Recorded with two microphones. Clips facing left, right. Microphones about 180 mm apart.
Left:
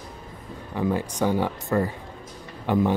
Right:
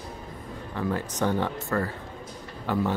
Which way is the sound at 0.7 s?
15° left (ahead or behind).